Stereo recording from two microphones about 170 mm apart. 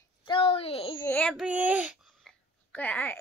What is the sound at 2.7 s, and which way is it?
Speech, 10° left (ahead or behind).